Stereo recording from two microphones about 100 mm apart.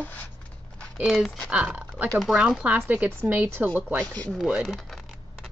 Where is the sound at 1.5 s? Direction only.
10° right (ahead or behind).